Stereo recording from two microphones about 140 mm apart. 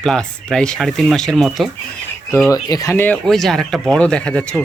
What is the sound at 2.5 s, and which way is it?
Speech, 25° left (ahead or behind).